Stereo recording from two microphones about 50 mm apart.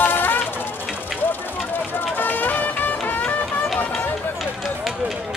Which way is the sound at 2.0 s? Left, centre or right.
Left.